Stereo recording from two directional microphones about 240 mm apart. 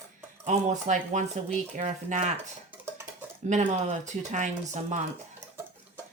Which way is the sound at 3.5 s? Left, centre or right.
Right.